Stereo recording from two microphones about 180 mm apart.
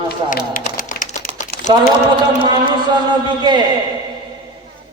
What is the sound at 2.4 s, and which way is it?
A man's voice, 25° right (ahead or behind).